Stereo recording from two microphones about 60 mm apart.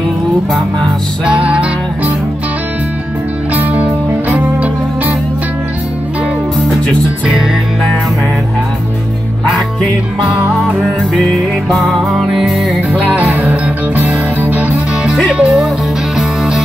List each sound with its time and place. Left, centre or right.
1.2 s music: right
3.5 s music: right
11.7 s music: centre
12.9 s music: right